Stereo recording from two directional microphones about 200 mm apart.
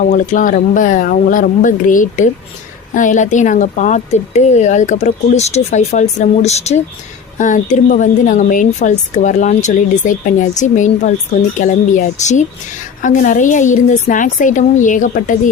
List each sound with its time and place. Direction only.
0.0 s speech: 40° left (ahead or behind)